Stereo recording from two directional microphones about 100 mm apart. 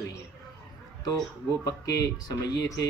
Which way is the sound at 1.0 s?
40° left (ahead or behind).